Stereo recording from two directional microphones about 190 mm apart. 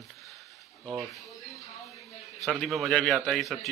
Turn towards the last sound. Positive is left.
turn(degrees=0)  # may be behind; listen again after turning